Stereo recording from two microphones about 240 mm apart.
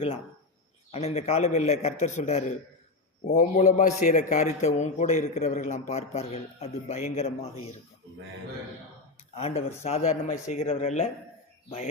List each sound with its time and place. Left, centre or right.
0.9 s a man's voice: left
9.3 s a man's voice: left